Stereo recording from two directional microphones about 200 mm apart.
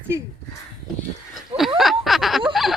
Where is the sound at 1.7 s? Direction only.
Centre (ahead or behind).